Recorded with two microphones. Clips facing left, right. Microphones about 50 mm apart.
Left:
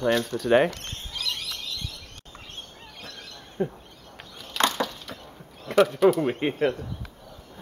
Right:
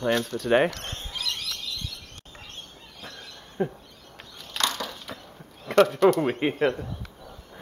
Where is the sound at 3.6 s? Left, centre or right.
Centre.